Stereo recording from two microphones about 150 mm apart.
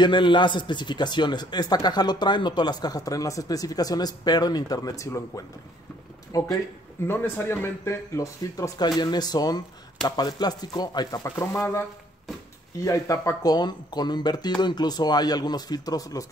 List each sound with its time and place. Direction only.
0.0 s speech: 30° left (ahead or behind)
12.8 s speech: 20° left (ahead or behind)